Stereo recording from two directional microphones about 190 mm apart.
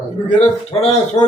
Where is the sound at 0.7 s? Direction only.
35° left (ahead or behind).